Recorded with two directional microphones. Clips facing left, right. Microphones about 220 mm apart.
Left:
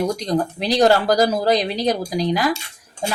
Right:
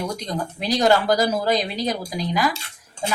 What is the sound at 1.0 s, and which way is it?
Speech, 40° left (ahead or behind).